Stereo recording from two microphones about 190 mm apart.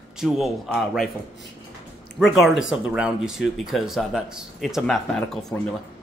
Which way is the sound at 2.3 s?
Centre (ahead or behind).